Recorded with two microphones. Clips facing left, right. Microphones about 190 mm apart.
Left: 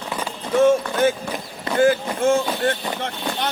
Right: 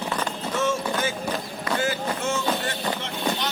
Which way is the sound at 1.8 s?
50° left (ahead or behind).